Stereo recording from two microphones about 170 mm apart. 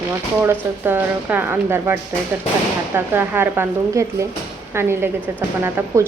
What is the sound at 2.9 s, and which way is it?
Speech, 10° right (ahead or behind).